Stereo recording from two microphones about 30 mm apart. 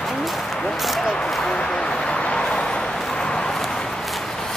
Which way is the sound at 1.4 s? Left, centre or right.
Left.